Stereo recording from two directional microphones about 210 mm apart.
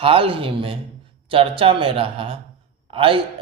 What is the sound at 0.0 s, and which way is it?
A man's voice, 25° right (ahead or behind).